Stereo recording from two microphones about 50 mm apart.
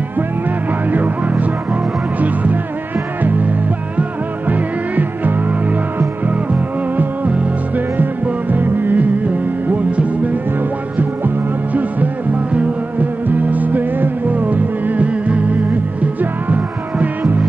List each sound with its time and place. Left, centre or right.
0.8 s music: right
9.7 s music: right